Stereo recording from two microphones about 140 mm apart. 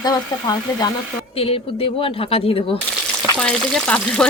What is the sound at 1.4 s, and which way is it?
Speech, 45° left (ahead or behind).